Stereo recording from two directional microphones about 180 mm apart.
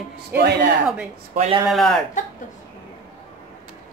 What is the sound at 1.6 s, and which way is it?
Speech, centre (ahead or behind).